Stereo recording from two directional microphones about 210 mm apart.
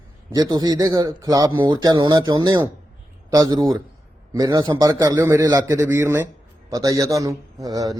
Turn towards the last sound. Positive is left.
turn(degrees=-15)  # may be behind; listen again after turning